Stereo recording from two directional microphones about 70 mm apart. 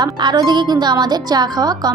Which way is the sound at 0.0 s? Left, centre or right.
Right.